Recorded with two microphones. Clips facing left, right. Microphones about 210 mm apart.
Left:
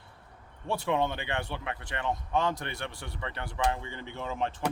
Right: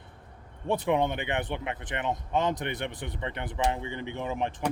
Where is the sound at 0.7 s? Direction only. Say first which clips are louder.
Right 3 dB; 15° right (ahead or behind).